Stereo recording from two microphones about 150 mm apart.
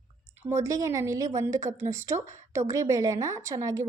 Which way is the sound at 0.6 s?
20° right (ahead or behind).